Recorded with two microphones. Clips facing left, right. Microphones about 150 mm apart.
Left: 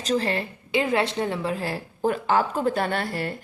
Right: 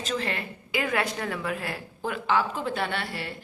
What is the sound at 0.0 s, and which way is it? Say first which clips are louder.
A woman's voice: left 6 dB; 35° left (ahead or behind).